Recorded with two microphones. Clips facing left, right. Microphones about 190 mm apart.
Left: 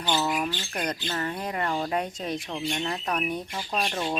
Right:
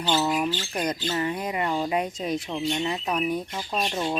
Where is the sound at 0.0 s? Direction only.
20° right (ahead or behind).